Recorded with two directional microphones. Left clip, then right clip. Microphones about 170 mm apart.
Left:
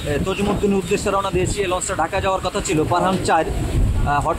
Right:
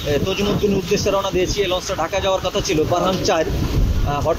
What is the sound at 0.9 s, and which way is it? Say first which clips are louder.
Speech: right 1 dB; 20° left (ahead or behind).